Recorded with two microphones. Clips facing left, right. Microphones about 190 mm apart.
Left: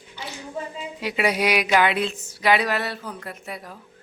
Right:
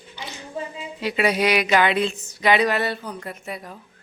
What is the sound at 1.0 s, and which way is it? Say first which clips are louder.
A woman's voice: right 2 dB; 10° left (ahead or behind).